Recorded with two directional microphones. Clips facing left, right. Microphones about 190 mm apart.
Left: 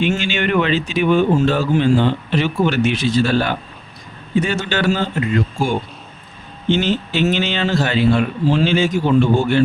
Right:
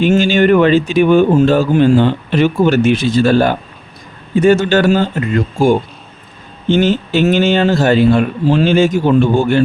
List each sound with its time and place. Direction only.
0.0 s speech: 40° right (ahead or behind)